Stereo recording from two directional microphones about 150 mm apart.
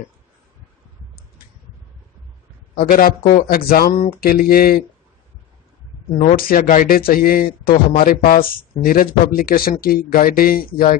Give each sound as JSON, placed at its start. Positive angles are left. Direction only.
{"t": 2.8, "sound": "speech", "side_deg": 75}
{"t": 6.1, "sound": "speech", "side_deg": 65}